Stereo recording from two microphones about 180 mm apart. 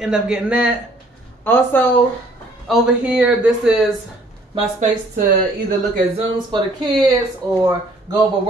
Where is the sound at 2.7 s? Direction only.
5° right (ahead or behind).